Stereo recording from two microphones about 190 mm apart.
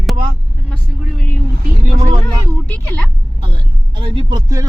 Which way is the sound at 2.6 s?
10° left (ahead or behind).